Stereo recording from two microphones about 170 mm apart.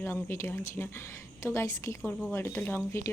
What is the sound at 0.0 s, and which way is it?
Speech, 15° left (ahead or behind).